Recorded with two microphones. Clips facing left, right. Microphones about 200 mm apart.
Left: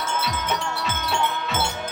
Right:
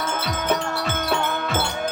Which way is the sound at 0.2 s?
50° right (ahead or behind).